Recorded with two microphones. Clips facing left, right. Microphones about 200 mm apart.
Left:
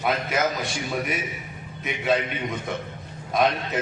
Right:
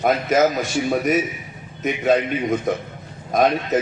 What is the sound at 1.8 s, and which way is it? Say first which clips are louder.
A man's voice: right 6 dB; 45° right (ahead or behind).